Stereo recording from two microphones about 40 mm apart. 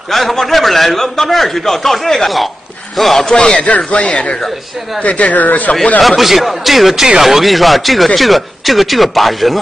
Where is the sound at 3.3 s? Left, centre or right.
Left.